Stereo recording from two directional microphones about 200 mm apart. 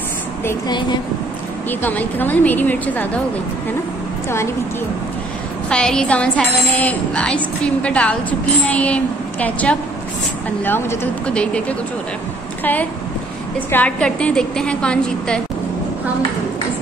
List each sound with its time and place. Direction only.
0.5 s a woman's voice: 20° left (ahead or behind)
1.7 s speech: 10° left (ahead or behind)
5.7 s speech: 5° left (ahead or behind)
13.7 s a woman's voice: 10° left (ahead or behind)